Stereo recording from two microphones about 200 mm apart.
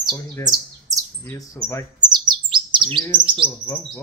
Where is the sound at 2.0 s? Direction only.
20° right (ahead or behind).